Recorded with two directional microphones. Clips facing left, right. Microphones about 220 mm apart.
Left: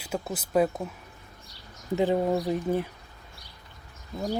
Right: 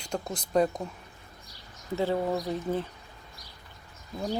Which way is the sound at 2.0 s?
15° left (ahead or behind).